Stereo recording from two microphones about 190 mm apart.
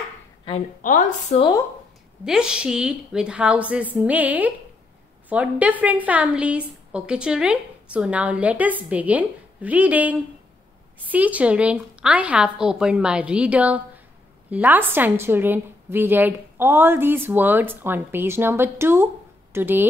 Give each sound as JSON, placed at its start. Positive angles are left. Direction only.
{"t": 0.5, "sound": "a woman's voice", "side_deg": 40}
{"t": 2.2, "sound": "a woman's voice", "side_deg": -5}